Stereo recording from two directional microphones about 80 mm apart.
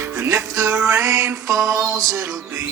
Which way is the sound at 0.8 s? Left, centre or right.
Right.